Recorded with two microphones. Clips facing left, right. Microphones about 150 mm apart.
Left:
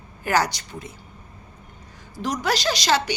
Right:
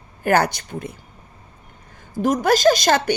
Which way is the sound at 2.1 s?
50° right (ahead or behind).